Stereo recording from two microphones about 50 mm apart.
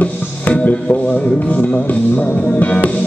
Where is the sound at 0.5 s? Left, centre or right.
Left.